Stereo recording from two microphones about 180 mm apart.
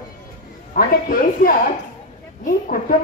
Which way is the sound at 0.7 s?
50° left (ahead or behind).